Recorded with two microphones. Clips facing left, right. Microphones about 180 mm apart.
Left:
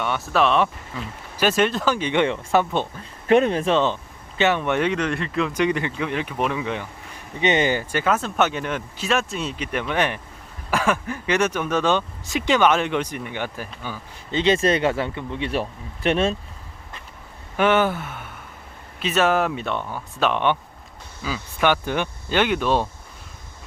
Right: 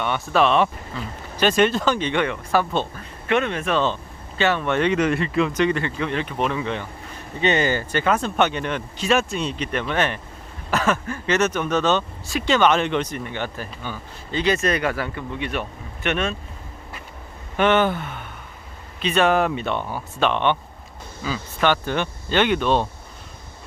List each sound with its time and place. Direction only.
0.0 s speech: centre (ahead or behind)
2.1 s speech: 25° left (ahead or behind)
3.2 s speech: 35° left (ahead or behind)
4.4 s speech: 15° left (ahead or behind)
4.9 s speech: 5° right (ahead or behind)
5.5 s speech: 15° left (ahead or behind)
14.3 s speech: 25° left (ahead or behind)
17.6 s speech: 5° left (ahead or behind)